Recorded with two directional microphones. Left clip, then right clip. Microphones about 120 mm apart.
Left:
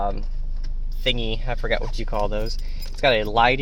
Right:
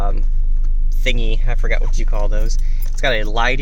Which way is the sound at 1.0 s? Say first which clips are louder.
Right 1 dB; 10° right (ahead or behind).